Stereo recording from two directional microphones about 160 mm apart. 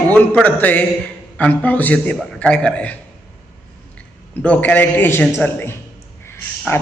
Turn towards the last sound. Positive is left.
turn(degrees=15)  # may be behind; listen again after turning